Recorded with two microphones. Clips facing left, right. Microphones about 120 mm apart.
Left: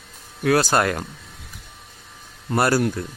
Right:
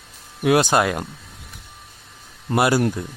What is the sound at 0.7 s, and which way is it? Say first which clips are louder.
Speech: right 1 dB; 5° right (ahead or behind).